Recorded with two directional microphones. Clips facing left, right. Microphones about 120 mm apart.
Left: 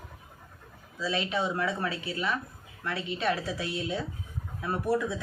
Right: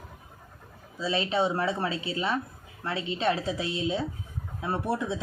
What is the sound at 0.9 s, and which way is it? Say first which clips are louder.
Speech: right 3 dB; 25° right (ahead or behind).